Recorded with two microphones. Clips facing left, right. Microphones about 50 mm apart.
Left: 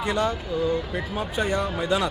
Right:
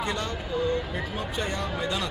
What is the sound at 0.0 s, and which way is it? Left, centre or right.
Speech, centre.